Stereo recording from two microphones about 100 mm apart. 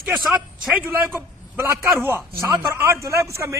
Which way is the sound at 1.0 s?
25° right (ahead or behind).